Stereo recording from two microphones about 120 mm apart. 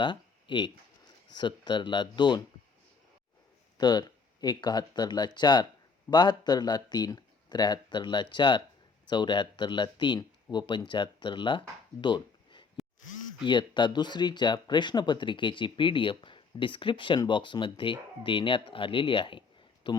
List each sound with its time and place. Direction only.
0.0 s speech: 40° left (ahead or behind)
3.8 s speech: 35° left (ahead or behind)
11.9 s a sound: 40° left (ahead or behind)
13.4 s speech: 40° left (ahead or behind)